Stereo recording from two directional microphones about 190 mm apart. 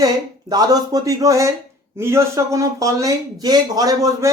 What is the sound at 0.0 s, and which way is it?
Speech, 20° right (ahead or behind).